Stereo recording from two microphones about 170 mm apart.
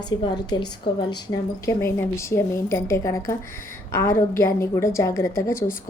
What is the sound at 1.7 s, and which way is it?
A woman's voice, 15° left (ahead or behind).